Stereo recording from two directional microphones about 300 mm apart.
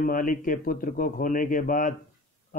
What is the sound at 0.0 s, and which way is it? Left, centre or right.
Speech, left.